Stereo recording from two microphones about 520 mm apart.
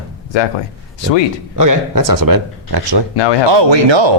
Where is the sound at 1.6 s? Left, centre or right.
Right.